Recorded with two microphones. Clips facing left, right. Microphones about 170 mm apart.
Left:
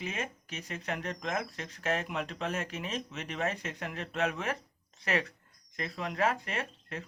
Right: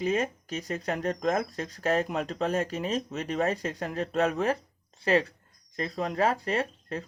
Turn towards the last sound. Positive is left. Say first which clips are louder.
# right 8 dB
turn(degrees=-35)  # may be behind; listen again after turning